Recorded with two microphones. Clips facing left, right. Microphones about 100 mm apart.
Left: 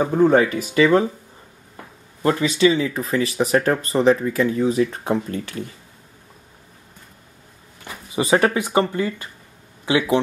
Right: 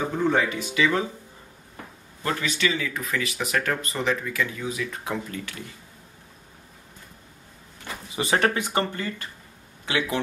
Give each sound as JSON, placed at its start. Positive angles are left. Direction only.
{"t": 0.2, "sound": "speech", "side_deg": 45}
{"t": 2.2, "sound": "speech", "side_deg": 30}
{"t": 8.2, "sound": "speech", "side_deg": 15}